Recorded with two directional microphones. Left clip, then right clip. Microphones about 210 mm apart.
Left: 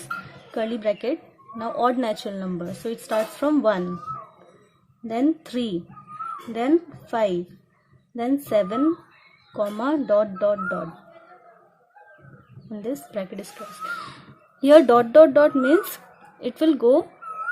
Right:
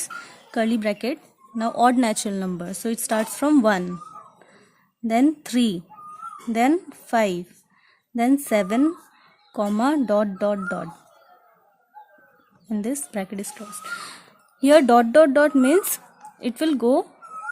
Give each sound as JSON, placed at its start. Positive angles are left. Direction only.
{"t": 0.5, "sound": "speech", "side_deg": -35}
{"t": 5.0, "sound": "speech", "side_deg": -35}
{"t": 12.7, "sound": "speech", "side_deg": -35}